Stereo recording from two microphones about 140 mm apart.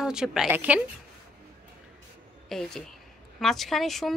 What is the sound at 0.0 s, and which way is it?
Speech, 5° right (ahead or behind).